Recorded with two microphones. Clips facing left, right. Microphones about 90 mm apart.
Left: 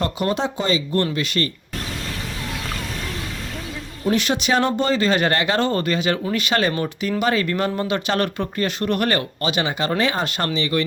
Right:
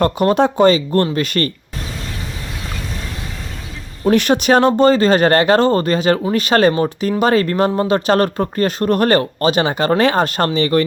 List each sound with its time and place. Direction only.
0.0 s speech: 50° right (ahead or behind)
4.1 s speech: 50° right (ahead or behind)